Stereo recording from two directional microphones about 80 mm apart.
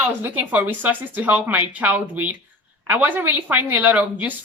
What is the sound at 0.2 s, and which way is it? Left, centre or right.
Speech, right.